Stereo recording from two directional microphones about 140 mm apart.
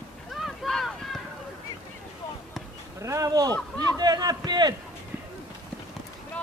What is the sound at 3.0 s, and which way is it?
Speech, 20° right (ahead or behind).